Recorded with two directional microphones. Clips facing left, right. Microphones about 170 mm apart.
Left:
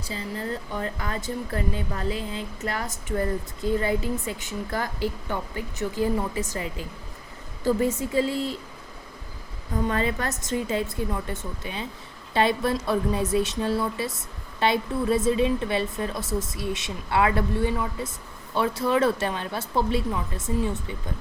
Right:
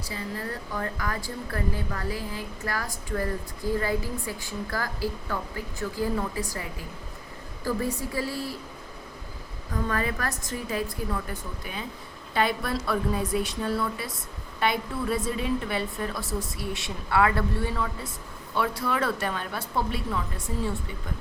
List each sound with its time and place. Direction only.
0.1 s speech: 25° left (ahead or behind)
9.8 s speech: 25° left (ahead or behind)